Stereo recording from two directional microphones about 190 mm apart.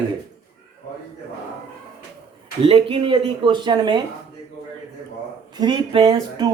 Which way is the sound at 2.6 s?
30° right (ahead or behind).